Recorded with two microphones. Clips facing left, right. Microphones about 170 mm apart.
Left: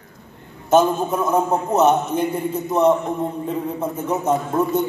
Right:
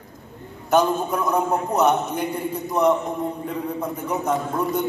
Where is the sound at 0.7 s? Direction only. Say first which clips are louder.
Left 3 dB; 25° left (ahead or behind).